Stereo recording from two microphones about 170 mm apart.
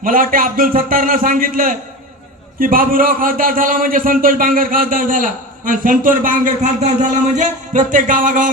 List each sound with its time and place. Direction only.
0.0 s a man's voice: 55° right (ahead or behind)
7.3 s music: 50° right (ahead or behind)